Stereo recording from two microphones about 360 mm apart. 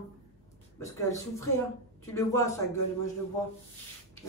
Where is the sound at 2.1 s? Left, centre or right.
Centre.